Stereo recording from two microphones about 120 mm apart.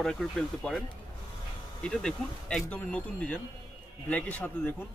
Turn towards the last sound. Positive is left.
turn(degrees=15)  # may be behind; listen again after turning